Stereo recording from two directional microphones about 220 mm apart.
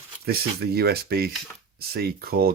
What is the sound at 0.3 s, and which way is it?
Speech, 45° right (ahead or behind).